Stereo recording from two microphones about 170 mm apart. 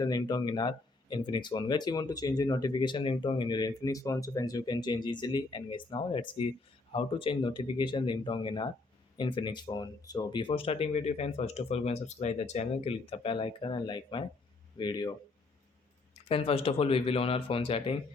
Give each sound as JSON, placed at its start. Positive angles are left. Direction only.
{"t": 0.0, "sound": "speech", "side_deg": 20}
{"t": 16.3, "sound": "speech", "side_deg": 35}